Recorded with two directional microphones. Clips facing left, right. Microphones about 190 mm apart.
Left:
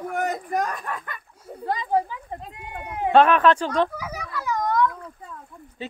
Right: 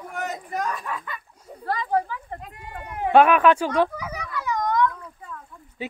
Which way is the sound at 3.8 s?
5° left (ahead or behind).